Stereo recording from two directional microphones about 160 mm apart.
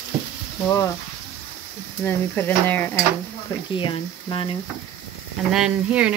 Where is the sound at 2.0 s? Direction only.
10° left (ahead or behind).